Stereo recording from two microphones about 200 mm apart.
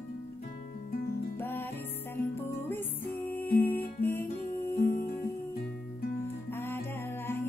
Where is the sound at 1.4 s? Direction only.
10° left (ahead or behind).